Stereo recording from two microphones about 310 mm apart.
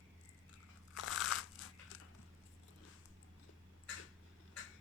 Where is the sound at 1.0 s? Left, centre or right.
Left.